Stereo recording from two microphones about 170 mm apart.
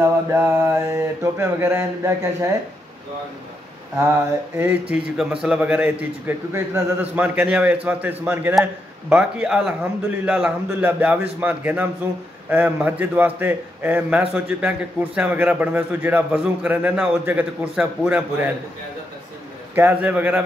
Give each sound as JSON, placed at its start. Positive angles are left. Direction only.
{"t": 0.0, "sound": "a man's voice", "side_deg": -15}
{"t": 4.6, "sound": "a man's voice", "side_deg": -10}
{"t": 19.7, "sound": "a man's voice", "side_deg": -10}